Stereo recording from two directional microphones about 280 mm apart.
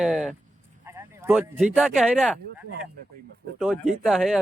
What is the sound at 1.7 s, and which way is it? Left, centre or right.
Speech, centre.